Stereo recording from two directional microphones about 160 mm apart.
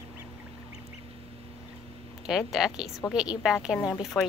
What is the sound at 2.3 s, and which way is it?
Speech, 5° right (ahead or behind).